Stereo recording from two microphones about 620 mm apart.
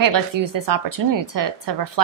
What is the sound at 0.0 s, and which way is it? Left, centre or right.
A woman's voice, right.